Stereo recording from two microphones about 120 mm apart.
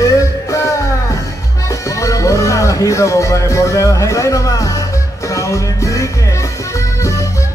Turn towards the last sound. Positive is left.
turn(degrees=25)  # may be behind; listen again after turning